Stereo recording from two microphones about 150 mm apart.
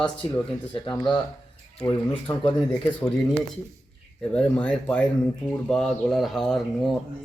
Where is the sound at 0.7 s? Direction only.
30° left (ahead or behind).